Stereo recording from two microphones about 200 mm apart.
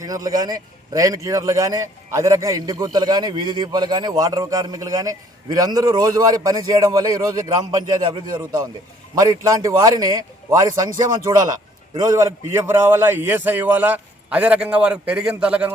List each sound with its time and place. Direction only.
0.0 s a man's voice: 20° right (ahead or behind)